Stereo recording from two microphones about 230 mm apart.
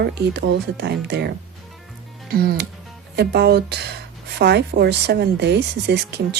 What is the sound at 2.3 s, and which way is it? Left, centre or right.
Speech, right.